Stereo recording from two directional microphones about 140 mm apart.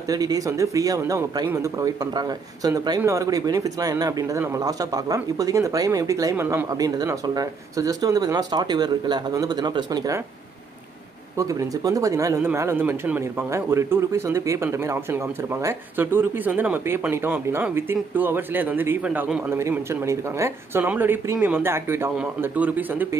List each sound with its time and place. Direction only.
0.1 s speech: 25° right (ahead or behind)
11.3 s speech: 25° right (ahead or behind)
19.7 s speech: 20° right (ahead or behind)